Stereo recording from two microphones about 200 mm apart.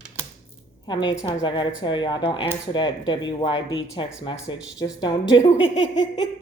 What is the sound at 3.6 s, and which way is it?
Speech, 65° left (ahead or behind).